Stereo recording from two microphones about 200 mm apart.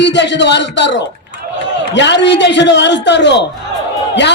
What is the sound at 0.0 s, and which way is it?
Speech, 60° left (ahead or behind).